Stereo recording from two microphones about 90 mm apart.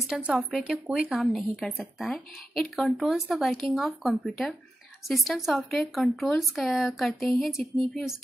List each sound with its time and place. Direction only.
0.2 s a woman's voice: 5° right (ahead or behind)